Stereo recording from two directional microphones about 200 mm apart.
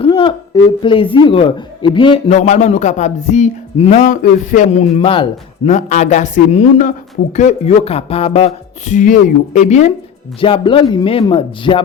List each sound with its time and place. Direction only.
0.0 s a man's voice: 25° left (ahead or behind)
10.4 s speech: 25° left (ahead or behind)